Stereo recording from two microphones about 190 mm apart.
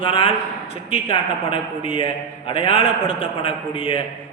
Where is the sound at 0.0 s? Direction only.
30° left (ahead or behind).